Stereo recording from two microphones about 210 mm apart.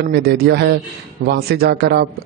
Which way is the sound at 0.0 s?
50° right (ahead or behind).